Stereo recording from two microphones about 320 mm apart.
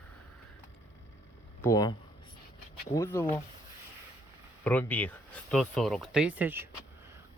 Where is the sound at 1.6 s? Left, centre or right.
Centre.